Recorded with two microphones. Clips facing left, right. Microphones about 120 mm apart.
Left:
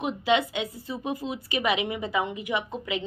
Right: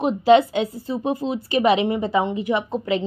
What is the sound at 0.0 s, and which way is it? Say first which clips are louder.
A woman's voice: right 9 dB; 35° right (ahead or behind).